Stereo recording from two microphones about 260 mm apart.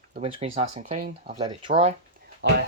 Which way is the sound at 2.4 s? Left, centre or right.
Right.